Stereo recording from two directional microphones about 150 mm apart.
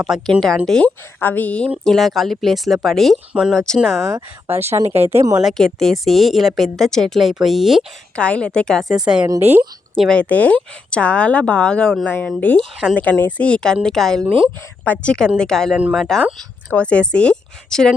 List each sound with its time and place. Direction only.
0.0 s a woman's voice: centre (ahead or behind)
4.0 s speech: 15° right (ahead or behind)
4.8 s speech: 45° right (ahead or behind)
5.4 s a woman's voice: centre (ahead or behind)
8.9 s a woman's voice: 5° right (ahead or behind)
10.0 s a woman's voice: 5° left (ahead or behind)